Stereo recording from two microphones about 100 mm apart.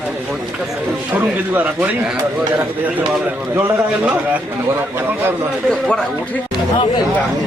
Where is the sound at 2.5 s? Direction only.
20° right (ahead or behind).